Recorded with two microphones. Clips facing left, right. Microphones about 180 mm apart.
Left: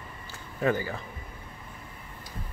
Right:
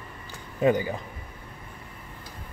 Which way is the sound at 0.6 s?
15° right (ahead or behind).